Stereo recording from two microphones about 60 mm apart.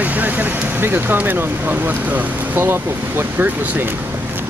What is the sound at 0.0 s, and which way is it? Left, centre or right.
Speech, right.